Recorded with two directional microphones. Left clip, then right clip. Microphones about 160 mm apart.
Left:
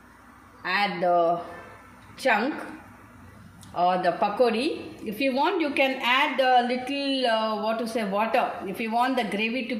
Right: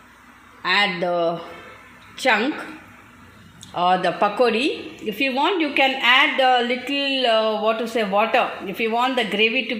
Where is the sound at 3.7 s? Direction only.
50° right (ahead or behind).